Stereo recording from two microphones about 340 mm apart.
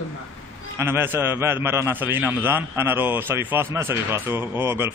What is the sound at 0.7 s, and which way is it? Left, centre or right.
A man's voice, centre.